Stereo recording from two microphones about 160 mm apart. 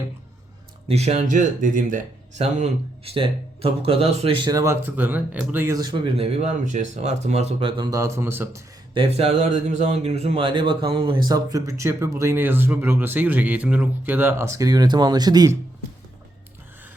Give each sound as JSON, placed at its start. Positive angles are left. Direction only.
{"t": 0.9, "sound": "speech", "side_deg": -40}
{"t": 6.1, "sound": "speech", "side_deg": -40}
{"t": 9.0, "sound": "speech", "side_deg": -40}